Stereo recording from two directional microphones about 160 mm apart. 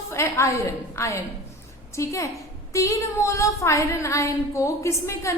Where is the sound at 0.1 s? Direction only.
20° left (ahead or behind).